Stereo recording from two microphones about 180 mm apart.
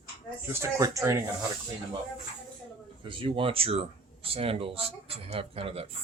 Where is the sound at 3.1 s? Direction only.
30° right (ahead or behind).